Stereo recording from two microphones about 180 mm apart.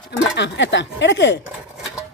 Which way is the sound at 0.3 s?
75° left (ahead or behind).